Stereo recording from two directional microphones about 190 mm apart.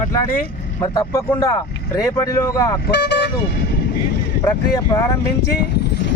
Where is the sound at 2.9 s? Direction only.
60° left (ahead or behind).